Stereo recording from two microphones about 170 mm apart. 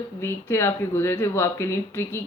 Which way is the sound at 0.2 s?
15° left (ahead or behind).